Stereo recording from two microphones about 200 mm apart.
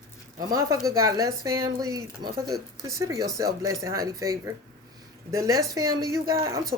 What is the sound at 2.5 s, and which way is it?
Speech, centre (ahead or behind).